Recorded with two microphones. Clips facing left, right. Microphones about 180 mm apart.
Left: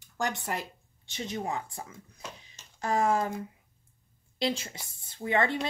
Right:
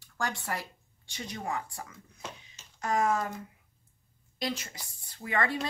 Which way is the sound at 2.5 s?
30° left (ahead or behind).